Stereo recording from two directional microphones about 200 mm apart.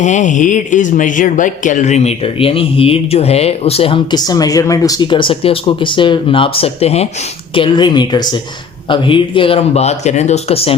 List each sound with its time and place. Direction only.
0.0 s speech: 40° left (ahead or behind)